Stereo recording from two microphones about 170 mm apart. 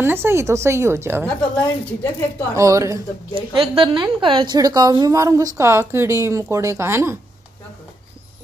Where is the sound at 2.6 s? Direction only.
20° right (ahead or behind).